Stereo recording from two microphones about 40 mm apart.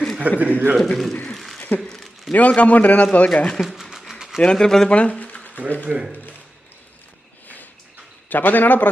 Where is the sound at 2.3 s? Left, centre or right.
Left.